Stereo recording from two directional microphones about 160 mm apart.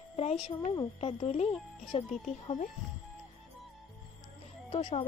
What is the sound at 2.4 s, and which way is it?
Speech, 50° left (ahead or behind).